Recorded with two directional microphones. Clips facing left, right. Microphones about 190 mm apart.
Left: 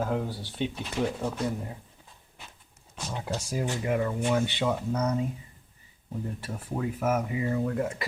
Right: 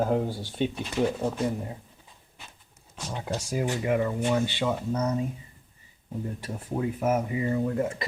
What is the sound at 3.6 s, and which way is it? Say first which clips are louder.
Speech: right 2 dB; 15° right (ahead or behind).